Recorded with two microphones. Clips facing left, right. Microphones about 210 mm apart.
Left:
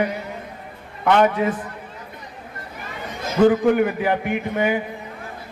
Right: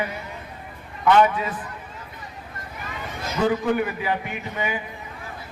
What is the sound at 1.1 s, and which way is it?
Speech, 50° left (ahead or behind).